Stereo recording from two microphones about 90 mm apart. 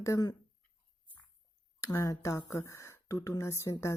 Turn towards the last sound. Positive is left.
turn(degrees=35)  # may be behind; listen again after turning